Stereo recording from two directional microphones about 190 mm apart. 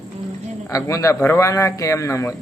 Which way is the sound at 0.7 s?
15° left (ahead or behind).